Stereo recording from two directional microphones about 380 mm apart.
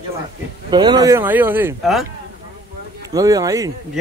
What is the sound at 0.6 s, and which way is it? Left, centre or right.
Speech, centre.